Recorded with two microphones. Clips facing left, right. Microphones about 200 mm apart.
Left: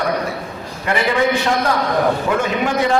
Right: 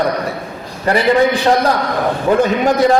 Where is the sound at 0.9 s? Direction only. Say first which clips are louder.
Right 5 dB; 35° right (ahead or behind).